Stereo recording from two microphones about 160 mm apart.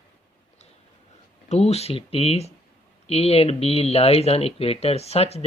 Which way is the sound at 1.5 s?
40° left (ahead or behind).